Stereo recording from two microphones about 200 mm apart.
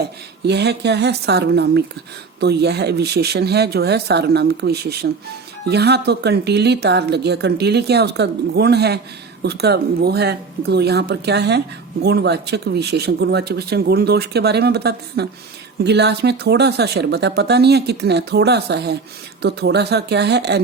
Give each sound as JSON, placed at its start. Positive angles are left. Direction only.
{"t": 0.0, "sound": "a woman's voice", "side_deg": -55}